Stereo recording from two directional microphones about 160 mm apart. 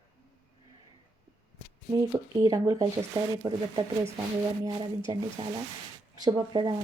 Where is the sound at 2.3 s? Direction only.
25° right (ahead or behind).